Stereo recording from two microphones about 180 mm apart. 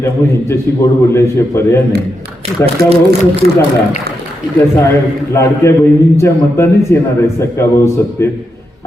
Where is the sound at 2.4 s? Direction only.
35° right (ahead or behind).